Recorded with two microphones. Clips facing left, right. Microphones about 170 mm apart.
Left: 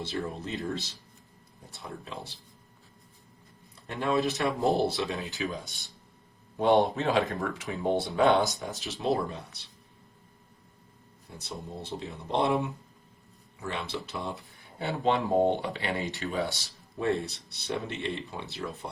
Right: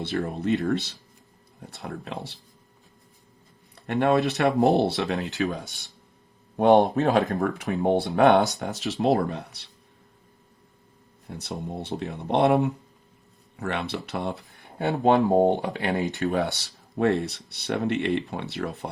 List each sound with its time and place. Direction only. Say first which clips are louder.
0.0 s speech: right 6 dB; 65° right (ahead or behind)
3.8 s speech: right 6 dB; 65° right (ahead or behind)
6.6 s speech: right 5 dB; 50° right (ahead or behind)
7.7 s speech: right 5 dB; 60° right (ahead or behind)
11.3 s speech: right 6 dB; 65° right (ahead or behind); by 16.0 s 45° right (ahead or behind)
16.2 s speech: right 6 dB; 60° right (ahead or behind)